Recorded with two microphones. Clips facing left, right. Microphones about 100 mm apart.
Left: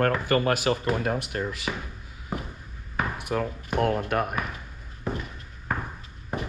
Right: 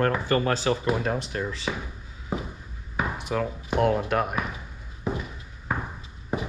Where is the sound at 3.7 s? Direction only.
5° right (ahead or behind).